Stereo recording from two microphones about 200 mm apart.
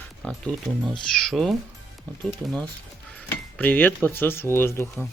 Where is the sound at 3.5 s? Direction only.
10° left (ahead or behind).